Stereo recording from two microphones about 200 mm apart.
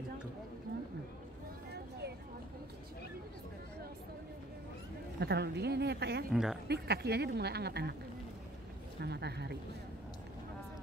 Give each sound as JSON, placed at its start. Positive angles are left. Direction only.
{"t": 1.7, "sound": "a sound", "side_deg": -55}
{"t": 5.2, "sound": "a woman's voice", "side_deg": -55}
{"t": 6.3, "sound": "a woman's voice", "side_deg": -5}
{"t": 6.7, "sound": "speech", "side_deg": -55}
{"t": 9.0, "sound": "a woman's voice", "side_deg": -55}